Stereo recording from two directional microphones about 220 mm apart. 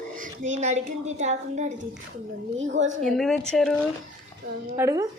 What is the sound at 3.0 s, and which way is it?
Speech, centre (ahead or behind).